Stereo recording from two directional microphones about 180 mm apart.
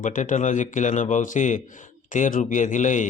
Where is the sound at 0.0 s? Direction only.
45° left (ahead or behind).